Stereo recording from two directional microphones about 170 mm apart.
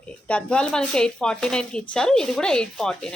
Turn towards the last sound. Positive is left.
turn(degrees=5)  # may be behind; listen again after turning